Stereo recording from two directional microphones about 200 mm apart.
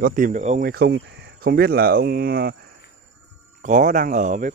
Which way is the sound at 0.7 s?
55° right (ahead or behind).